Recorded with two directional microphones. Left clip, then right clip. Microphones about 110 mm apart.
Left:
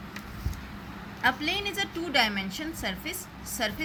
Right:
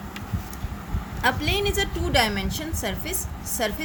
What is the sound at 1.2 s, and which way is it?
Speech, 55° right (ahead or behind).